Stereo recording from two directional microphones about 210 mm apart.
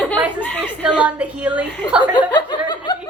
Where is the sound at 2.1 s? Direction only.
20° left (ahead or behind).